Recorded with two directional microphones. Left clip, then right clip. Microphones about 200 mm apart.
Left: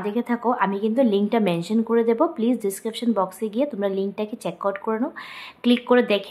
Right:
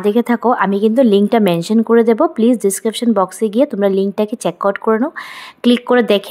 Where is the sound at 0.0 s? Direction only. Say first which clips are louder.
Right 10 dB; 40° right (ahead or behind).